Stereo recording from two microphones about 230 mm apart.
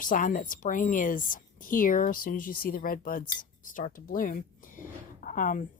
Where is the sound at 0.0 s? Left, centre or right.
Left.